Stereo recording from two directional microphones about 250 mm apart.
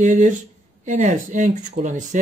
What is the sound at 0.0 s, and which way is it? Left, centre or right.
Speech, right.